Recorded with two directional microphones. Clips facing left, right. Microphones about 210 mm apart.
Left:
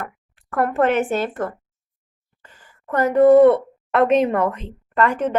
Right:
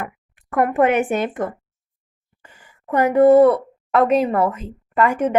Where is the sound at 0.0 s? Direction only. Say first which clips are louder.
Right 2 dB; 15° right (ahead or behind).